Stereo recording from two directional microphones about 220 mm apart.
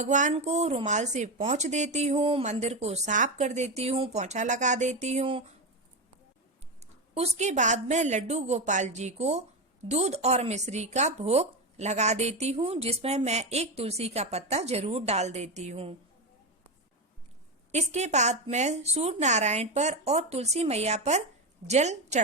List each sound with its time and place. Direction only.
0.0 s speech: 35° right (ahead or behind)
7.1 s speech: 30° right (ahead or behind)
17.7 s speech: 30° right (ahead or behind)